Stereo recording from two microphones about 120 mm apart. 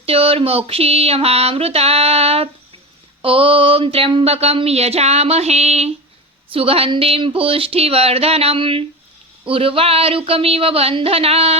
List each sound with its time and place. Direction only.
0.0 s speech: 55° right (ahead or behind)
6.5 s speech: 50° right (ahead or behind)